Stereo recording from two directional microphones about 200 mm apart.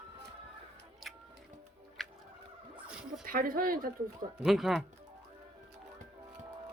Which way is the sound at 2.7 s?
5° right (ahead or behind).